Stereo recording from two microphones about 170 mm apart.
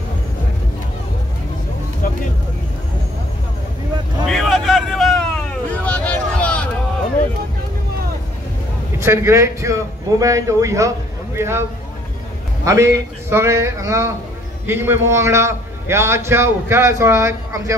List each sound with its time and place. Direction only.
4.3 s a sound: centre (ahead or behind)
9.0 s a man's voice: 15° right (ahead or behind)
12.6 s a man's voice: 15° right (ahead or behind)